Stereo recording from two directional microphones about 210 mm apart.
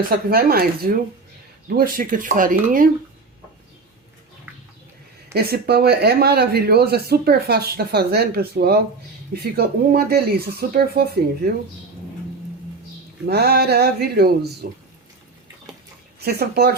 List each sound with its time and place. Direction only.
0.3 s speech: 45° right (ahead or behind)
5.3 s speech: 50° right (ahead or behind)
13.2 s speech: 50° right (ahead or behind)
16.2 s speech: 50° right (ahead or behind)